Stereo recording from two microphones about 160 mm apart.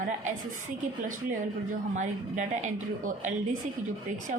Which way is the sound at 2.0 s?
50° right (ahead or behind).